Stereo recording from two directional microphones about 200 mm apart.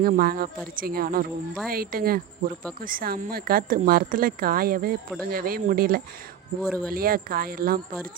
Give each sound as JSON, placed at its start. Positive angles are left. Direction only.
{"t": 0.0, "sound": "speech", "side_deg": -45}
{"t": 6.6, "sound": "speech", "side_deg": 5}
{"t": 6.9, "sound": "speech", "side_deg": -45}